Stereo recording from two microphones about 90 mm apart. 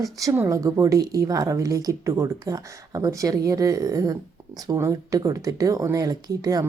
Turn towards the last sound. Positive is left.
turn(degrees=-45)  # may be behind; listen again after turning